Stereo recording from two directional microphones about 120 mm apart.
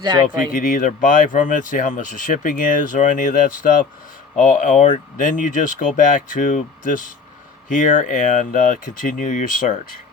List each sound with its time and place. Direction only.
0.0 s speech: 35° right (ahead or behind)
0.5 s speech: 90° left